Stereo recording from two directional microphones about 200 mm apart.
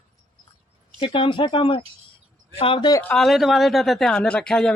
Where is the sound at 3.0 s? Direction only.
5° left (ahead or behind).